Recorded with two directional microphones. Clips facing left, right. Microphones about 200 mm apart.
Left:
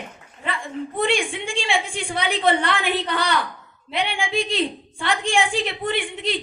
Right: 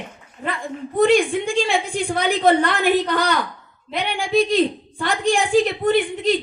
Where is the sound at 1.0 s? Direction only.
40° right (ahead or behind).